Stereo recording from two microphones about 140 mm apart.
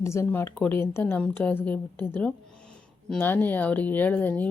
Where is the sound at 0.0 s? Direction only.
20° left (ahead or behind).